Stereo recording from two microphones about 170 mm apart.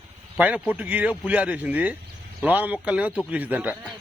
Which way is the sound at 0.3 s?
10° right (ahead or behind).